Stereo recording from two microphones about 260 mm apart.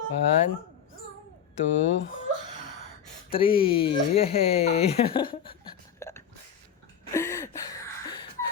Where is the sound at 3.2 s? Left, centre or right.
Left.